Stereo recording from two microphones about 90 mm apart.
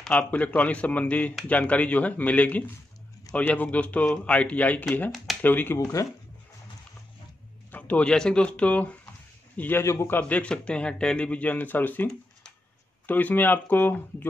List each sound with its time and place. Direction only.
0.0 s a man's voice: 10° left (ahead or behind)
5.1 s a sound: centre (ahead or behind)
5.4 s speech: 20° left (ahead or behind)
7.7 s a man's voice: 15° left (ahead or behind)